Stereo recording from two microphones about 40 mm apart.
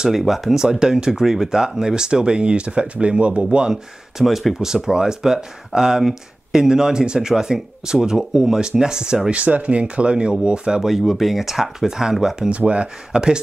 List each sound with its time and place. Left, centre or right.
0.2 s speech: centre
0.6 s speech: centre
4.2 s speech: centre
9.3 s speech: right
10.8 s speech: centre
12.4 s speech: right